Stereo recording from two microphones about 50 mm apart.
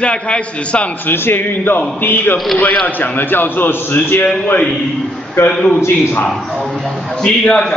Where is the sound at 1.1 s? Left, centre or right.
Left.